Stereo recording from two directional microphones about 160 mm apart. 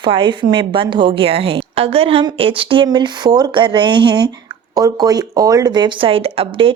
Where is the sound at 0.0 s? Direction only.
30° right (ahead or behind).